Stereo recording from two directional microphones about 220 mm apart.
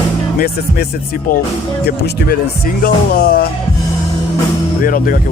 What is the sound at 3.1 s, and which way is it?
Music, 40° left (ahead or behind).